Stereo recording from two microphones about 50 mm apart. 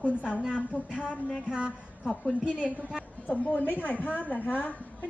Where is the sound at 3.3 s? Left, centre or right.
Left.